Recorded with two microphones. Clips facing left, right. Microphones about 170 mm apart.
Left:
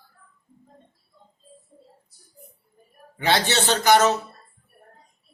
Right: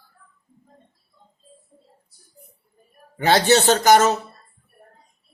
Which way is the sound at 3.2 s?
45° right (ahead or behind).